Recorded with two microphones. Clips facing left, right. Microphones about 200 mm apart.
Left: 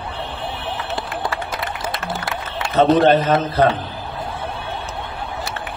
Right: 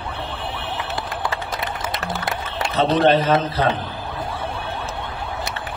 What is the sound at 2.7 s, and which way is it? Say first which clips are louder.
Speech: left 3 dB; 45° left (ahead or behind).